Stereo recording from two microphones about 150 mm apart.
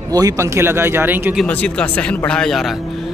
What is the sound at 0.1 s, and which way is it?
Speech, 20° right (ahead or behind).